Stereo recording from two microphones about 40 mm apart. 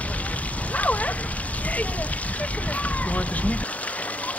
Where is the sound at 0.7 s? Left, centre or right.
Left.